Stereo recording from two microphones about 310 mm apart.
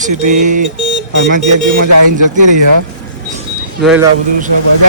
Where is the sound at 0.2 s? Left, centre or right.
Right.